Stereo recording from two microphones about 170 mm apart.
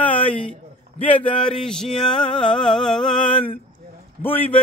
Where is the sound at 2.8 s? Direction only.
5° left (ahead or behind).